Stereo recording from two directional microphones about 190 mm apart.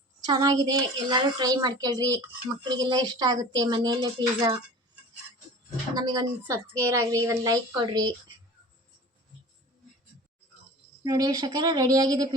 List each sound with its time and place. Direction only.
0.3 s a woman's voice: 20° right (ahead or behind)
5.9 s a woman's voice: 20° right (ahead or behind)
11.0 s a woman's voice: 20° right (ahead or behind)